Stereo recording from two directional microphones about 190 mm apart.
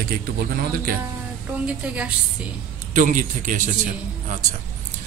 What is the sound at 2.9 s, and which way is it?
Speech, 40° right (ahead or behind).